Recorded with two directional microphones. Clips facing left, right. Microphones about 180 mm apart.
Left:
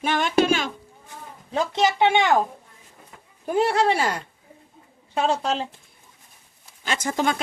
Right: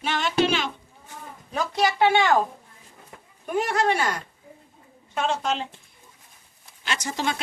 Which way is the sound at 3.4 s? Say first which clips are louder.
Left 3 dB; 30° left (ahead or behind).